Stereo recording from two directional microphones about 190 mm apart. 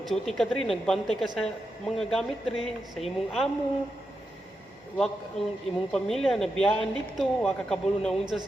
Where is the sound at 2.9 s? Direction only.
Centre (ahead or behind).